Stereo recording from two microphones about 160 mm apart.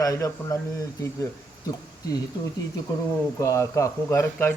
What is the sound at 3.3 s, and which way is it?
Speech, 20° left (ahead or behind).